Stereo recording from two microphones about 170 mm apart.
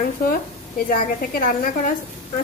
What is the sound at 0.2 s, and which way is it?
Speech, 55° left (ahead or behind).